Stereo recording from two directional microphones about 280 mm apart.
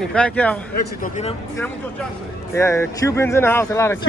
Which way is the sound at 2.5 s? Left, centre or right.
Centre.